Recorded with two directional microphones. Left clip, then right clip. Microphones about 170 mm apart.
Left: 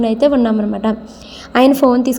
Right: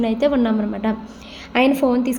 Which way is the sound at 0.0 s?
20° left (ahead or behind).